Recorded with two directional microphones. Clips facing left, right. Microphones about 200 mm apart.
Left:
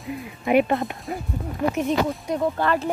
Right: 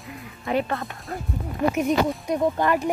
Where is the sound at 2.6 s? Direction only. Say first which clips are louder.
Right 1 dB; 15° right (ahead or behind).